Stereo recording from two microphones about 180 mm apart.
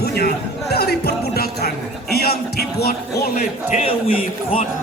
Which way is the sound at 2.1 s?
60° left (ahead or behind).